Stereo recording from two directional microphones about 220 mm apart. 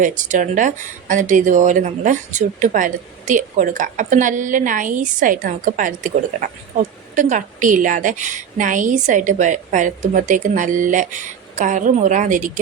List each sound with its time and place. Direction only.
0.0 s speech: 35° right (ahead or behind)